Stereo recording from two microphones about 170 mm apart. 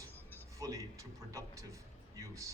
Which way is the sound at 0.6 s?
20° right (ahead or behind).